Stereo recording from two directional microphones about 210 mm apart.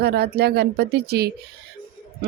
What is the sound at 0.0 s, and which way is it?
Speech, 50° right (ahead or behind).